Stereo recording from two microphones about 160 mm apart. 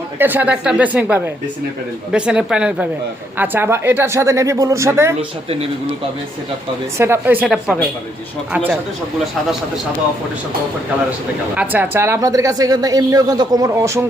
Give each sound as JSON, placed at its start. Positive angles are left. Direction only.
{"t": 0.2, "sound": "speech", "side_deg": -10}
{"t": 7.0, "sound": "speech", "side_deg": -15}
{"t": 11.5, "sound": "speech", "side_deg": -10}